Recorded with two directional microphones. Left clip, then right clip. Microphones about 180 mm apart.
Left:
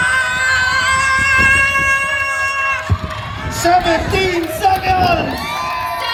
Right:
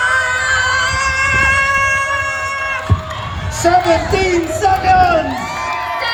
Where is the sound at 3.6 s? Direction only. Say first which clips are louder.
Right 1 dB; 30° left (ahead or behind).